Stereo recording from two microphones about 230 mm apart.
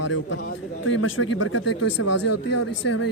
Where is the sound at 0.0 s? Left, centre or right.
Left.